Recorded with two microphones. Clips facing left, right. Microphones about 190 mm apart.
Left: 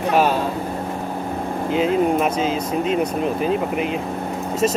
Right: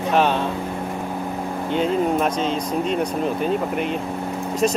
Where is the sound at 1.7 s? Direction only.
5° left (ahead or behind).